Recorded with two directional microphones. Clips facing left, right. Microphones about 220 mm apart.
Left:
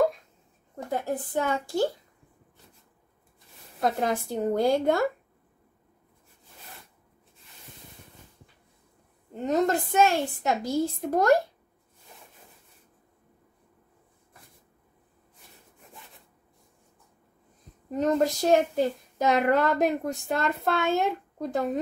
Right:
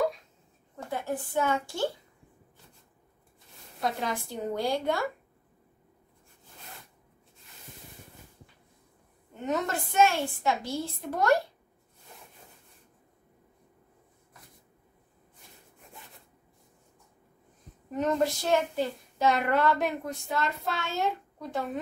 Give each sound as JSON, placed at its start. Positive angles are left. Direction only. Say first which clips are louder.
{"t": 0.9, "sound": "a woman's voice", "louder": "left 2 dB", "side_deg": 40}
{"t": 3.8, "sound": "speech", "louder": "left 5 dB", "side_deg": 50}
{"t": 9.3, "sound": "a woman's voice", "louder": "left 6 dB", "side_deg": 35}
{"t": 17.9, "sound": "speech", "louder": "left 3 dB", "side_deg": 35}